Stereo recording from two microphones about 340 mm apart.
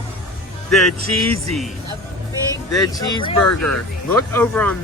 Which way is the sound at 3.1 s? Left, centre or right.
Centre.